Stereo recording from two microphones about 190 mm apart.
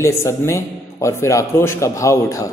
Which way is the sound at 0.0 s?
15° left (ahead or behind).